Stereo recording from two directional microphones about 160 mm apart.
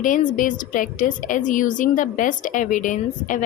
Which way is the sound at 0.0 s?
55° left (ahead or behind).